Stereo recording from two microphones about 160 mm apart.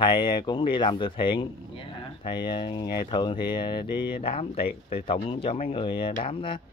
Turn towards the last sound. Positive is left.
turn(degrees=35)  # may be behind; listen again after turning